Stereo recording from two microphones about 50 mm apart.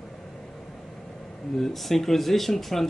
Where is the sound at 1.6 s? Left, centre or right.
Centre.